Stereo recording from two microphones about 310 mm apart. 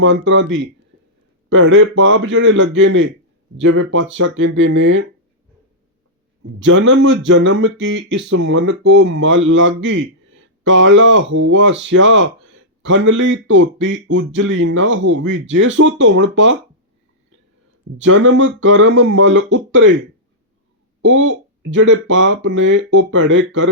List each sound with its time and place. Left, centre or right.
0.0 s speech: right
6.4 s speech: right
17.9 s speech: right
21.0 s speech: right